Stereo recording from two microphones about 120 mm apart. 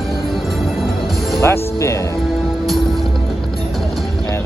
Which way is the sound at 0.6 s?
Centre (ahead or behind).